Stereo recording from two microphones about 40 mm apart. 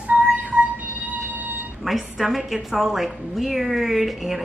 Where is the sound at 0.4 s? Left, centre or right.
Right.